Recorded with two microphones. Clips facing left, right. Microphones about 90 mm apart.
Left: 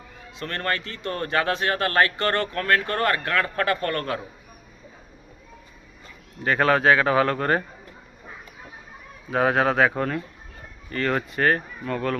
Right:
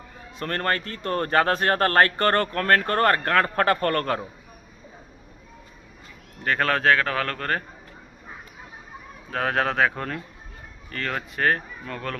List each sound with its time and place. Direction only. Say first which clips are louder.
0.3 s a man's voice: right 2 dB; 40° right (ahead or behind)
6.4 s speech: left 3 dB; 5° left (ahead or behind)
9.3 s speech: left 4 dB; 10° left (ahead or behind)